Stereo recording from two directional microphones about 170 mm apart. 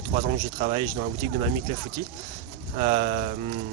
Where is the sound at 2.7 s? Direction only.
40° right (ahead or behind).